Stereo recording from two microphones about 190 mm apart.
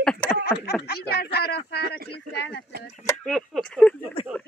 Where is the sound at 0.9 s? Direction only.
55° left (ahead or behind).